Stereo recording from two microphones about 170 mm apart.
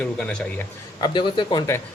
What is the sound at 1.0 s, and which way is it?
Speech, 30° left (ahead or behind).